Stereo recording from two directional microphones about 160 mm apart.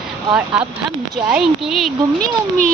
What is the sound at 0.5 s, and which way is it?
Speech, 5° right (ahead or behind).